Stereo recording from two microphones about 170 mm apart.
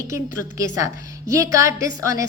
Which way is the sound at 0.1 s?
20° right (ahead or behind).